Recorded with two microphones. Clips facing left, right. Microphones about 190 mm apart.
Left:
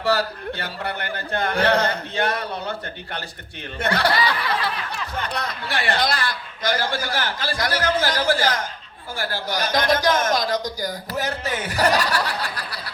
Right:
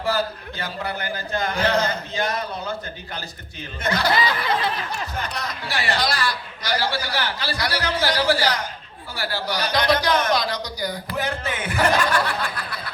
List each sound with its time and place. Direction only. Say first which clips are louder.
0.0 s a man's voice: left 2 dB; 70° left (ahead or behind)
4.1 s a sound: right 1 dB; 20° right (ahead or behind)
5.3 s a man's voice: left 2 dB; 60° left (ahead or behind); by 12.8 s 35° left (ahead or behind)